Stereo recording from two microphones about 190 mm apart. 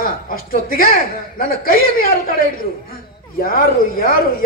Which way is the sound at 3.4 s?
50° left (ahead or behind).